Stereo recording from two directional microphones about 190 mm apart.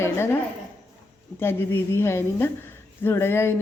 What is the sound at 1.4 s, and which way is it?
A woman's voice, 10° left (ahead or behind).